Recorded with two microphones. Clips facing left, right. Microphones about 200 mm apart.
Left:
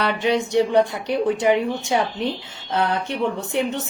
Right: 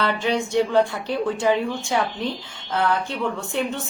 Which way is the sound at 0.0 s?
20° left (ahead or behind).